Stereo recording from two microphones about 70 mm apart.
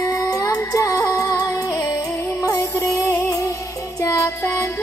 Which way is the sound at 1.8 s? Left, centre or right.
Left.